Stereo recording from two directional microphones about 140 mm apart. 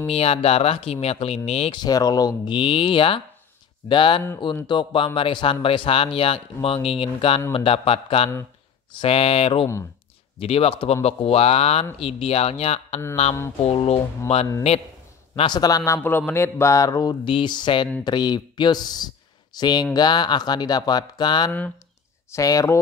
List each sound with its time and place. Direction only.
0.0 s speech: 45° left (ahead or behind)
1.8 s speech: 25° left (ahead or behind)
2.5 s speech: 40° left (ahead or behind)
15.3 s speech: 30° left (ahead or behind)
21.5 s speech: 10° left (ahead or behind)
22.3 s speech: 25° left (ahead or behind)